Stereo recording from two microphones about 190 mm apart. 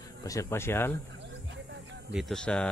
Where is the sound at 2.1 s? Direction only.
Centre (ahead or behind).